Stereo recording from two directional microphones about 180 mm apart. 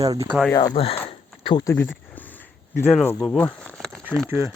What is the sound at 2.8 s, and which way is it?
Speech, 10° left (ahead or behind).